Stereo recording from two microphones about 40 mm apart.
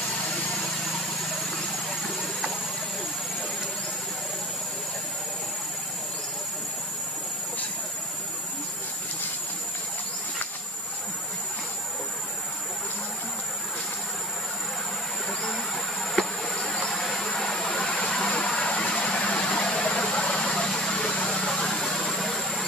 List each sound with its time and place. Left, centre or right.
16.2 s insect: left
17.5 s vehicle: left